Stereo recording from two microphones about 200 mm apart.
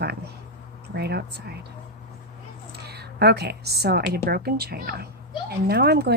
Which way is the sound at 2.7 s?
55° right (ahead or behind).